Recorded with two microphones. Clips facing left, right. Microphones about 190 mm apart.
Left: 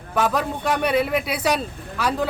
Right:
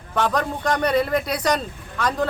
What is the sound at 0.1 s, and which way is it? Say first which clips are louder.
A man's voice: even; 5° left (ahead or behind).